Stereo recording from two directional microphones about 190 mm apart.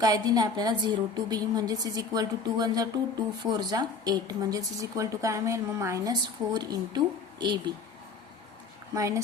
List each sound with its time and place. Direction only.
0.0 s a woman's voice: 20° right (ahead or behind)
9.0 s speech: 15° right (ahead or behind)